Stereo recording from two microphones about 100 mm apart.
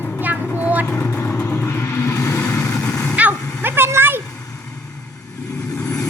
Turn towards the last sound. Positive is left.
turn(degrees=35)  # may be behind; listen again after turning